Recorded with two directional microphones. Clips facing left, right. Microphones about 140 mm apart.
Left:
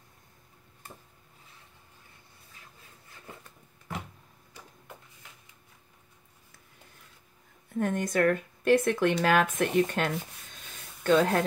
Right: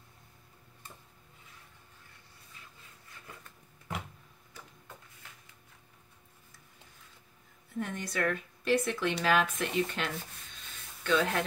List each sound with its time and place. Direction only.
7.8 s speech: 50° left (ahead or behind)